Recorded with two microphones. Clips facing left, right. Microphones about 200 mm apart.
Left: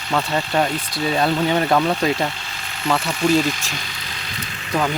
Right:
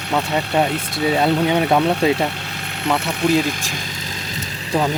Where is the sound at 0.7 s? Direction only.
65° right (ahead or behind).